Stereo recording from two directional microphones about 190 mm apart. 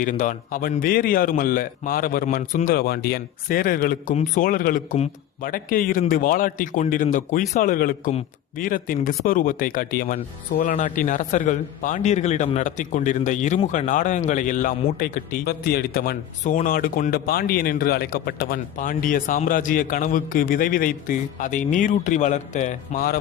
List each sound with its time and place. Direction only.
0.0 s speech: 45° left (ahead or behind)